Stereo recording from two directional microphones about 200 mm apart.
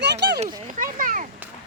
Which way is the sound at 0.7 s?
40° right (ahead or behind).